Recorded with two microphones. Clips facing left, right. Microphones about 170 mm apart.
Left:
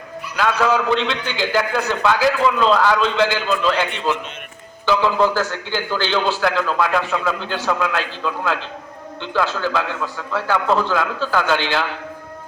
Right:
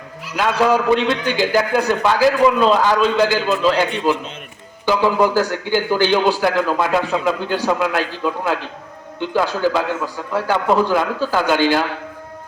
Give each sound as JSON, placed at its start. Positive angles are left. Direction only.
{"t": 0.3, "sound": "a man's voice", "side_deg": -15}
{"t": 1.0, "sound": "a man's voice", "side_deg": -45}
{"t": 1.5, "sound": "a man's voice", "side_deg": -10}